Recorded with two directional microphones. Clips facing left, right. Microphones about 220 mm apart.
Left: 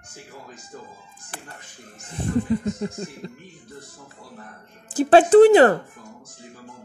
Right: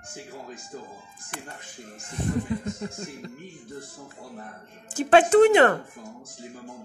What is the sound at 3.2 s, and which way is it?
Speech, 30° left (ahead or behind).